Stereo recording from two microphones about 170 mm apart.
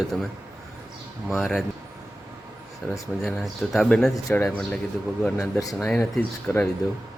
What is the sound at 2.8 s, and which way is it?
Speech, 10° left (ahead or behind).